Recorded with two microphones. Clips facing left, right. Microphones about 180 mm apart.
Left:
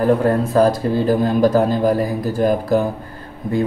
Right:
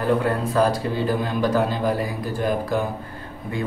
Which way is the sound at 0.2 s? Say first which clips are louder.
Left 6 dB; 40° left (ahead or behind).